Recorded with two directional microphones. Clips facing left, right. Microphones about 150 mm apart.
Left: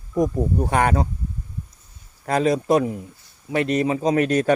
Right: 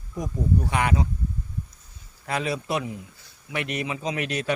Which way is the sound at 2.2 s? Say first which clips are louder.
Left 8 dB; 40° left (ahead or behind).